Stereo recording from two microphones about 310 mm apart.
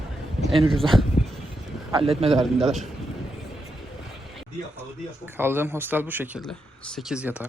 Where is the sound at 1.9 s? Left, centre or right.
Centre.